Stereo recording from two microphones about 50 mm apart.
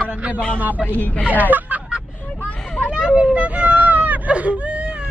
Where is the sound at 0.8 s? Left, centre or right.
Left.